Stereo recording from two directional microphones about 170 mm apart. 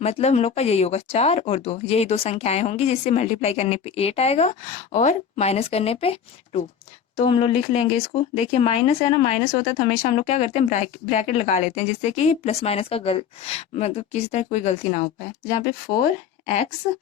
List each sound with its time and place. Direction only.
0.0 s speech: 35° left (ahead or behind)